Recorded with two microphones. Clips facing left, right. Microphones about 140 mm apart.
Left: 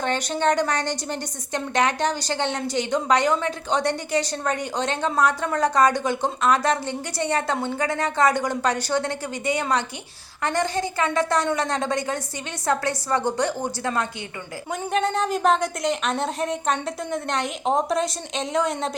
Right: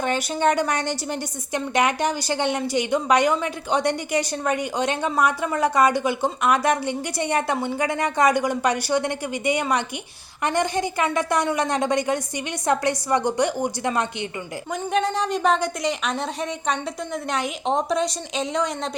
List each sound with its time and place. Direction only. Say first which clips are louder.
0.0 s a woman's voice: right 1 dB; 10° right (ahead or behind)
14.7 s a woman's voice: even; centre (ahead or behind)